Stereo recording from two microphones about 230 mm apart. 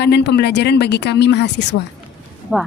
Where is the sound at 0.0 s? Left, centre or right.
Left.